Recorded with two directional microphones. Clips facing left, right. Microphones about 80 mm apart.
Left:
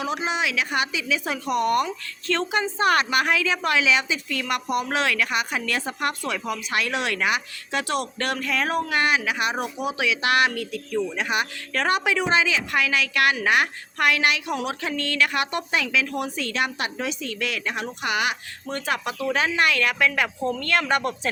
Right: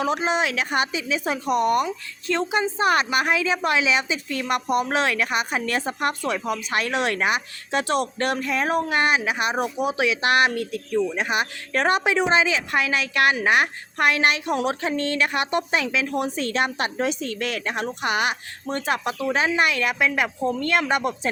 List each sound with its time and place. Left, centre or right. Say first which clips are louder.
0.3 s speech: right 2 dB; right; by 21.2 s centre